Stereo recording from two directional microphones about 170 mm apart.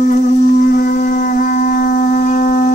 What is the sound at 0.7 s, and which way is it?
Shofar, 60° left (ahead or behind).